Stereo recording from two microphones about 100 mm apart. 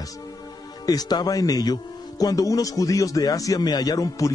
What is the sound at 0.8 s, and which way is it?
Speech, 40° left (ahead or behind).